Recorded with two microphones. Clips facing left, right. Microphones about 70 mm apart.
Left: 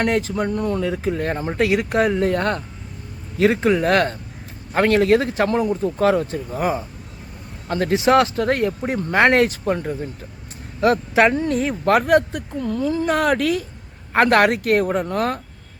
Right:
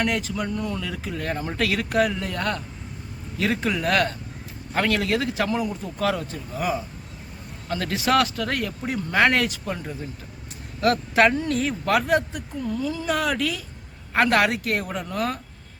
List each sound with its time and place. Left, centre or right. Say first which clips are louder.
0.0 s speech: left 5 dB; left
10.8 s speech: left 3 dB; left